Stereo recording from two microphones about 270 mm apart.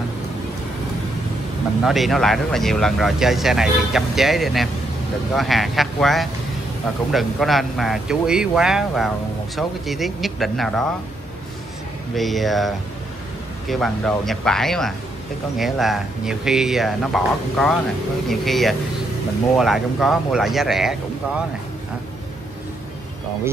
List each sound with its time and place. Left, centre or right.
1.8 s speech: centre
12.2 s speech: centre